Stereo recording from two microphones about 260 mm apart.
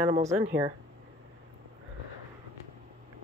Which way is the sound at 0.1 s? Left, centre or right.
Right.